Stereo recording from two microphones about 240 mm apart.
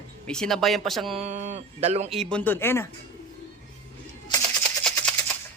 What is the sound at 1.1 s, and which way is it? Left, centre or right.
Speech, right.